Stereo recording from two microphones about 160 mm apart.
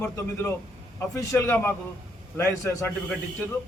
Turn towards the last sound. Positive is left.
turn(degrees=10)  # may be behind; listen again after turning